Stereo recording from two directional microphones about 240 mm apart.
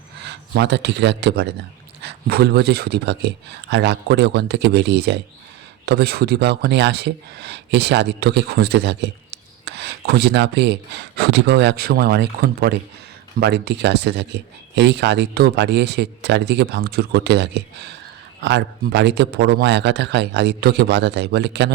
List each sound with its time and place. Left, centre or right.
0.3 s speech: right